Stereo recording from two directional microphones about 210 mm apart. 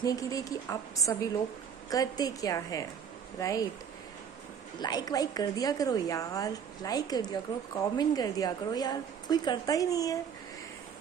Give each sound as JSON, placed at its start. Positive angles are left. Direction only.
{"t": 0.0, "sound": "a woman's voice", "side_deg": 15}
{"t": 4.7, "sound": "a woman's voice", "side_deg": 20}